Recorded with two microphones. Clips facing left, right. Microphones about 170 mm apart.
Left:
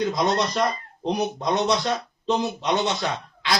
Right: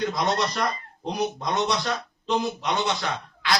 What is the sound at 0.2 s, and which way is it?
A man's voice, 20° left (ahead or behind).